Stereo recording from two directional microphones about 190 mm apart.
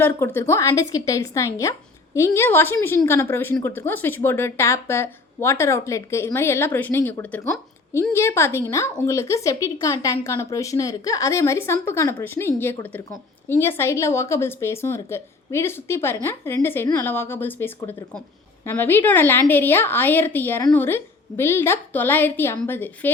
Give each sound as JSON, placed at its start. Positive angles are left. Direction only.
{"t": 0.0, "sound": "a woman's voice", "side_deg": 15}